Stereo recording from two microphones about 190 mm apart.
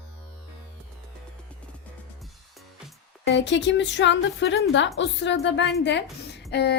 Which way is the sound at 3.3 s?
70° left (ahead or behind).